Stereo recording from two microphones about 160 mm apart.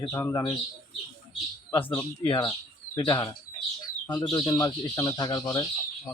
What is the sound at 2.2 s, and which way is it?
Speech, 20° left (ahead or behind).